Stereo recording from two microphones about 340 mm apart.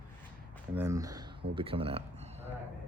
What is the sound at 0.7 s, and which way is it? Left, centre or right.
Speech, centre.